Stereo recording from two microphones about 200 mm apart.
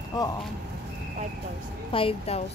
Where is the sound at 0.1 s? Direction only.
20° left (ahead or behind).